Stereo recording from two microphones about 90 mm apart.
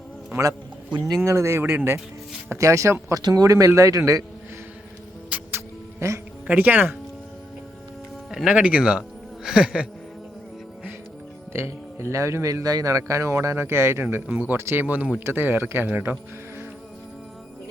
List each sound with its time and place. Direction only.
0.9 s speech: 45° right (ahead or behind)
1.2 s speech: 30° right (ahead or behind)
5.3 s music: 25° right (ahead or behind)
6.5 s speech: 20° right (ahead or behind)
8.4 s speech: 10° right (ahead or behind)
11.5 s speech: 30° right (ahead or behind)